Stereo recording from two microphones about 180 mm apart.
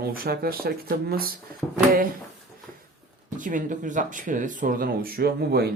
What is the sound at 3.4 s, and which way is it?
Speech, 45° right (ahead or behind).